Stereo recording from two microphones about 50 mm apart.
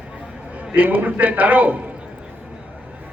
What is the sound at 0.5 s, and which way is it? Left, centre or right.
A man's voice, right.